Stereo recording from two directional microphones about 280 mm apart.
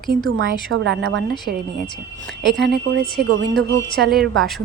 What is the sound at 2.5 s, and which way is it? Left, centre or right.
A woman's voice, centre.